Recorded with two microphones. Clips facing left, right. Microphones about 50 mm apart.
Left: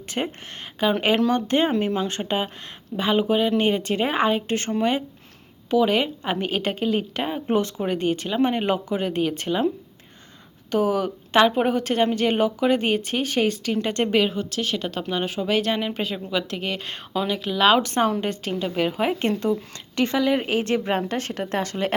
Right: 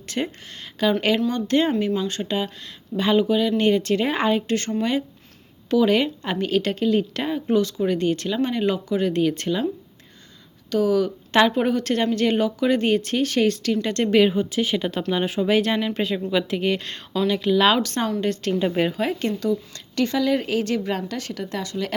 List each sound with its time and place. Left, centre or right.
0.1 s speech: left
7.3 s speech: left
8.4 s speech: left; by 9.6 s centre
10.7 s speech: left
11.3 s speech: centre
14.2 s a woman's voice: centre
16.9 s speech: centre
17.7 s speech: left
18.6 s a woman's voice: centre
18.9 s a woman's voice: centre; by 21.9 s left